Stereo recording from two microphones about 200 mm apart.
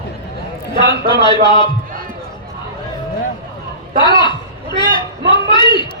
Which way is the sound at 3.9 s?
25° left (ahead or behind).